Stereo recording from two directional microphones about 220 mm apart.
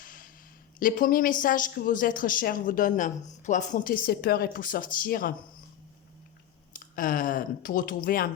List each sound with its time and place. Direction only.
0.0 s a sound: 40° left (ahead or behind)
0.8 s speech: 40° left (ahead or behind)
6.7 s speech: 40° left (ahead or behind)